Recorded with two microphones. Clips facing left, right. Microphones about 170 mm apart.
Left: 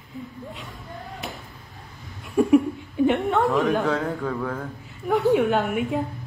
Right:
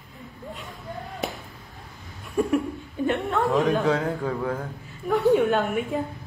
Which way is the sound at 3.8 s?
25° right (ahead or behind).